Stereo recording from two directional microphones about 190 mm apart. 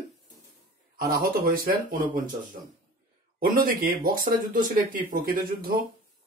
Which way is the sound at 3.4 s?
50° right (ahead or behind).